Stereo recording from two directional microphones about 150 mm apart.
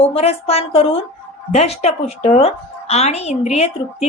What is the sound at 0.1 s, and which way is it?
A woman's voice, 40° left (ahead or behind).